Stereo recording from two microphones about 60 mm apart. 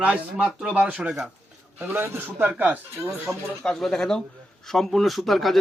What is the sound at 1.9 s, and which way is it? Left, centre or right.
Speech, right.